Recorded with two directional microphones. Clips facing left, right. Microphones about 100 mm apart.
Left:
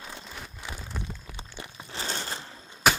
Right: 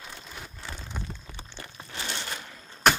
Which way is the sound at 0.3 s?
Centre (ahead or behind).